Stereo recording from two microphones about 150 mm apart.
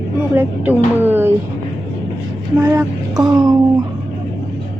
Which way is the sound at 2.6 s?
15° right (ahead or behind).